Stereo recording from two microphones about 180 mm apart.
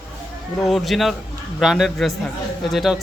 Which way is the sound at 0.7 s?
Centre (ahead or behind).